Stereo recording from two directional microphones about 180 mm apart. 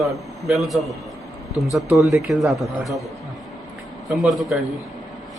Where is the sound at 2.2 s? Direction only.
Centre (ahead or behind).